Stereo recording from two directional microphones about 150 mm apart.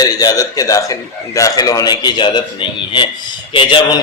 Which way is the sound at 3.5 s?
35° left (ahead or behind).